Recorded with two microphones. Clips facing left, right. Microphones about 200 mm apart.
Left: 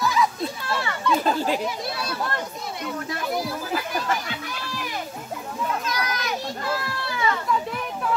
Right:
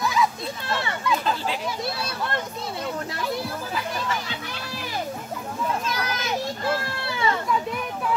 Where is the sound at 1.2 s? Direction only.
45° left (ahead or behind).